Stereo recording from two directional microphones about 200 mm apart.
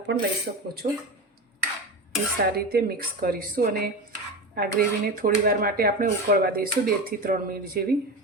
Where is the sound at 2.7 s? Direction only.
50° right (ahead or behind).